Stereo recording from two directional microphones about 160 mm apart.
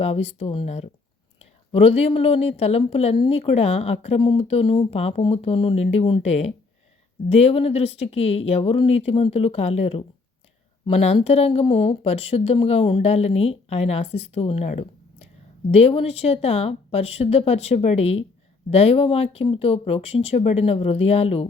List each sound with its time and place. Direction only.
0.0 s speech: 40° left (ahead or behind)